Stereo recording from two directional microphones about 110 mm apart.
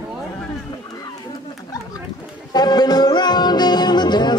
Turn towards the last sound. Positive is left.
turn(degrees=40)  # may be behind; listen again after turning